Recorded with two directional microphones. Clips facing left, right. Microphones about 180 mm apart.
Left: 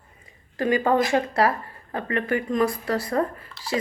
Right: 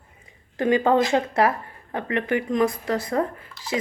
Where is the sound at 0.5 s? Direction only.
20° right (ahead or behind).